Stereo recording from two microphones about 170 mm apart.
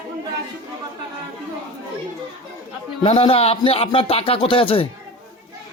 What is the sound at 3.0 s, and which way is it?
Speech, 35° left (ahead or behind).